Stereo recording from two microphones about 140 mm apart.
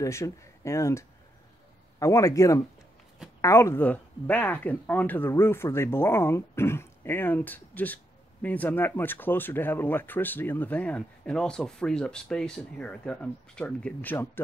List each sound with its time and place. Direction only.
0.0 s speech: 20° left (ahead or behind)